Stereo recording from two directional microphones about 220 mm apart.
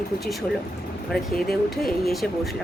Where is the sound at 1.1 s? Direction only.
Centre (ahead or behind).